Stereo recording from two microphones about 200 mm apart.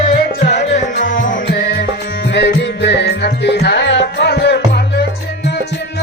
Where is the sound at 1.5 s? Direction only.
60° left (ahead or behind).